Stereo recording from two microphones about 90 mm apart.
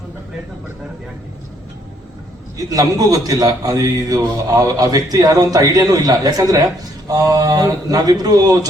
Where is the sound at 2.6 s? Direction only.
40° right (ahead or behind).